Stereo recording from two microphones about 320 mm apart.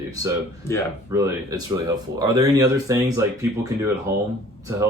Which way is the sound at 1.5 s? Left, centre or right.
Centre.